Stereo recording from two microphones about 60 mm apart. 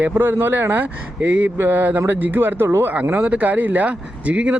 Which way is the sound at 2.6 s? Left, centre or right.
Right.